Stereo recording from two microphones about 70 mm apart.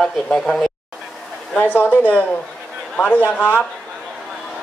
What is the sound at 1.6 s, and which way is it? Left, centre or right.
A woman's voice, left.